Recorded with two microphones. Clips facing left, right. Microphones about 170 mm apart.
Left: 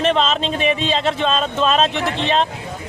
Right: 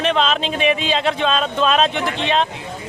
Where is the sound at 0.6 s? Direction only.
30° left (ahead or behind).